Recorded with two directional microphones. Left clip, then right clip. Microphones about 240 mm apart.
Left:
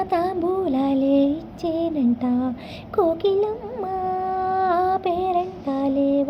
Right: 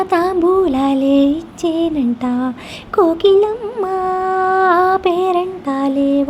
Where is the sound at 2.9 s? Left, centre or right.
Right.